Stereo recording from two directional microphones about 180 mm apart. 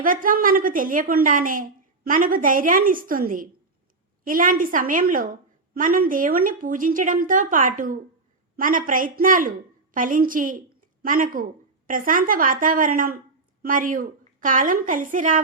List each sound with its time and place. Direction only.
0.0 s a woman's voice: 50° right (ahead or behind)